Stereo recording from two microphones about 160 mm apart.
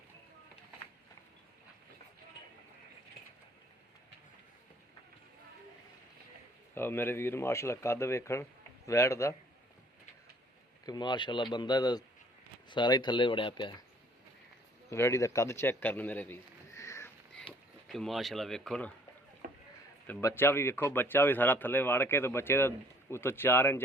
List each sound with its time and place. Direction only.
6.7 s speech: 15° left (ahead or behind)
10.8 s speech: 25° left (ahead or behind)
14.8 s speech: 15° left (ahead or behind)
17.5 s a sound: 35° left (ahead or behind)
17.8 s speech: centre (ahead or behind)
19.4 s rowboat: 70° right (ahead or behind)
20.1 s speech: 15° left (ahead or behind)